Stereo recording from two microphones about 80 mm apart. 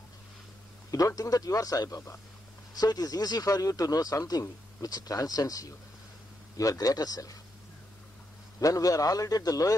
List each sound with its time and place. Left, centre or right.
0.9 s speech: left
8.5 s speech: left